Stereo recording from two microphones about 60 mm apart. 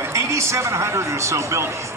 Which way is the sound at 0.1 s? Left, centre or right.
Right.